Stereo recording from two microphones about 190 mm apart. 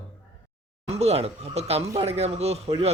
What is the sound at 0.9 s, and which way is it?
Speech, 35° right (ahead or behind).